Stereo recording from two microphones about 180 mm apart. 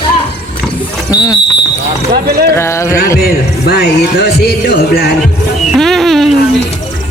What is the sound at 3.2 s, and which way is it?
Speech, 60° left (ahead or behind).